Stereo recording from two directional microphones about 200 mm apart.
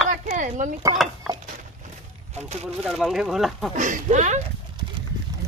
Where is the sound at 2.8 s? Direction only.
Centre (ahead or behind).